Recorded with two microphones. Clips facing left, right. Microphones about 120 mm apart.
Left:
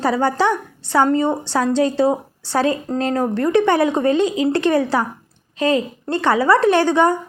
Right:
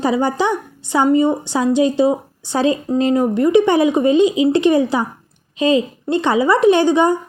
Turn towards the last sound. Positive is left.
turn(degrees=-15)  # may be behind; listen again after turning